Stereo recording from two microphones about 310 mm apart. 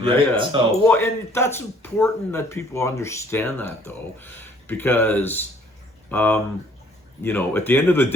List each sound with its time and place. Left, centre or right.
0.0 s speech: centre
0.9 s speech: centre